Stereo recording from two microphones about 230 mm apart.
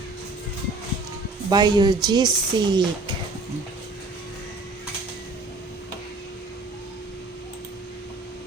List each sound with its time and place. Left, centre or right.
1.5 s speech: centre